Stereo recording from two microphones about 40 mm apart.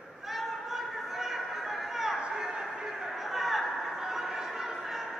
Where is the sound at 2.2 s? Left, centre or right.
Centre.